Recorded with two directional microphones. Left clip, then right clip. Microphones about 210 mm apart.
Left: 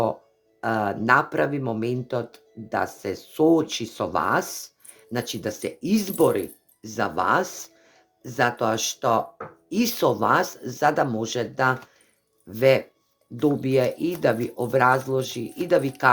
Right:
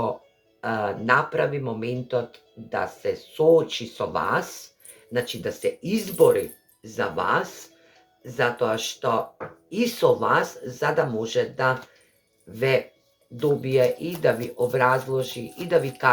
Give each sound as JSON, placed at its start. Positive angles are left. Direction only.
{"t": 0.6, "sound": "speech", "side_deg": 55}